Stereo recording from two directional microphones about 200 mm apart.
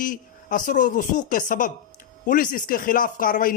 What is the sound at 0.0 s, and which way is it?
Speech, 40° left (ahead or behind).